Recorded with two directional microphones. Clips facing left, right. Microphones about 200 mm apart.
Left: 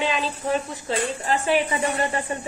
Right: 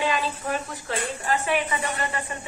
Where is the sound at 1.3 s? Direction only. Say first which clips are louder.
Left 3 dB; 30° left (ahead or behind).